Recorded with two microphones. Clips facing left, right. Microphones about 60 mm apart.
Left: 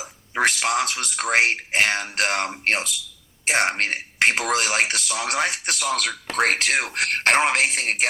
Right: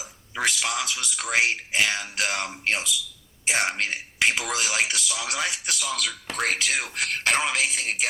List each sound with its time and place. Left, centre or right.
0.0 s a man's voice: left